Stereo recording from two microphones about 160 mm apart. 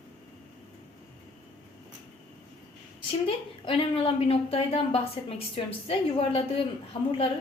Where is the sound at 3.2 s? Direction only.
35° left (ahead or behind).